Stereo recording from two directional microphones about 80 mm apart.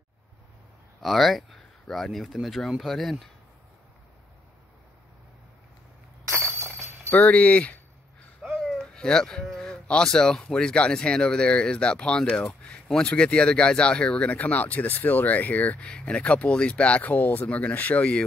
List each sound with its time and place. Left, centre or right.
1.0 s speech: centre
7.1 s a sound: centre
8.4 s speech: centre